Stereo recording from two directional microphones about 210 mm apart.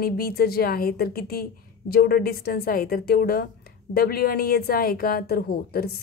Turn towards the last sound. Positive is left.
turn(degrees=45)  # may be behind; listen again after turning